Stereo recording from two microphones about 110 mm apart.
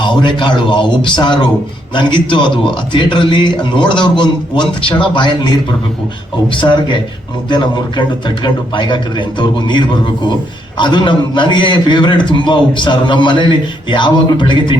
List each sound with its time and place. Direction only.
0.0 s a man's voice: 45° left (ahead or behind)